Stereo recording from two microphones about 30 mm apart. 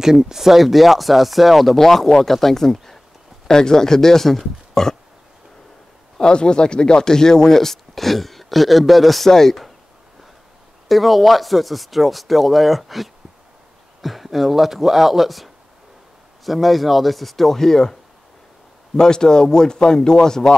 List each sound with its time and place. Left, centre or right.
0.0 s a man's voice: centre
3.4 s a man's voice: left
6.1 s a man's voice: left; by 9.7 s centre
10.9 s speech: centre
18.9 s speech: left